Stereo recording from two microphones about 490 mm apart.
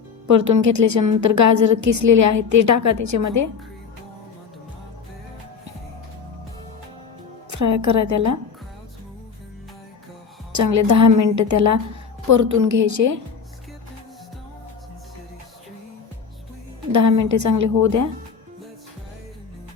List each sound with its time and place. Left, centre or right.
0.3 s a woman's voice: right
7.5 s a woman's voice: right
10.5 s a woman's voice: right
16.9 s a woman's voice: right